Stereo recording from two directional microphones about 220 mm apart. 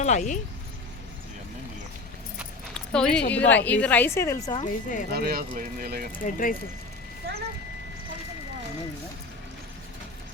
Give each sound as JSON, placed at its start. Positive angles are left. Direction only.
{"t": 0.0, "sound": "speech", "side_deg": 35}
{"t": 2.4, "sound": "keys jangling", "side_deg": 5}
{"t": 3.7, "sound": "a woman's voice", "side_deg": 5}
{"t": 4.6, "sound": "speech", "side_deg": 35}
{"t": 5.1, "sound": "speech", "side_deg": -45}
{"t": 6.1, "sound": "speech", "side_deg": 40}